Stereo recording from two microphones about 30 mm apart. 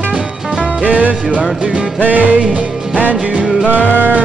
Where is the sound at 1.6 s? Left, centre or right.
Right.